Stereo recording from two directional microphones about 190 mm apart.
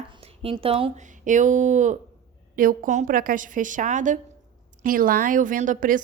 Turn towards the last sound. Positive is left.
turn(degrees=-45)  # may be behind; listen again after turning